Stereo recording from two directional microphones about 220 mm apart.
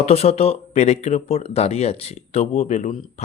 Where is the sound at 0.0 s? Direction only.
30° left (ahead or behind).